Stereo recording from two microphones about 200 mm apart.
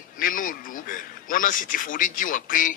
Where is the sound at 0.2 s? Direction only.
45° left (ahead or behind).